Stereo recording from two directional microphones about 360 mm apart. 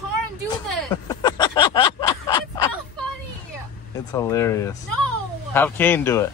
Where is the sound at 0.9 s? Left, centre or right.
Centre.